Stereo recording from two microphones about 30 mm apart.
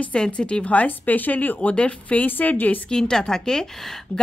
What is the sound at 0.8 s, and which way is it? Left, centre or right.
Speech, left.